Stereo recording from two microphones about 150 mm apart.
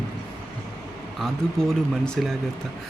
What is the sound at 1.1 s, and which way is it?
Speech, centre (ahead or behind).